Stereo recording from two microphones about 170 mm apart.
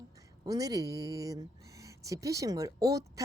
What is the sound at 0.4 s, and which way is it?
A woman's voice, 20° right (ahead or behind).